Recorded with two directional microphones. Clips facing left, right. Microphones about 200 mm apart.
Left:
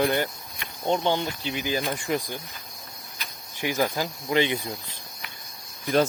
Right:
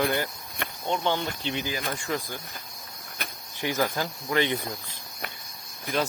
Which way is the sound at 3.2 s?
55° right (ahead or behind).